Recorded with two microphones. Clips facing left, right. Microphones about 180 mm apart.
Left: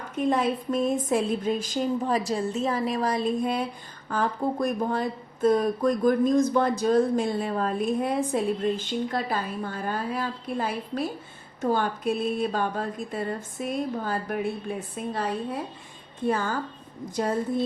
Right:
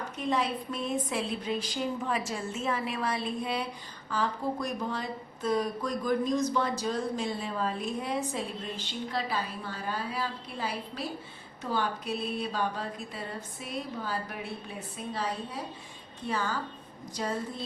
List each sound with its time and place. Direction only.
0.2 s a woman's voice: 50° left (ahead or behind)